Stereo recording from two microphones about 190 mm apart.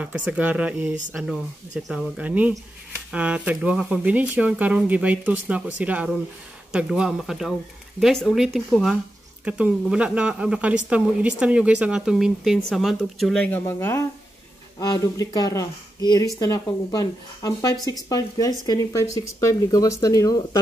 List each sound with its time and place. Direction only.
0.0 s speech: 5° right (ahead or behind); by 20.4 s 20° left (ahead or behind)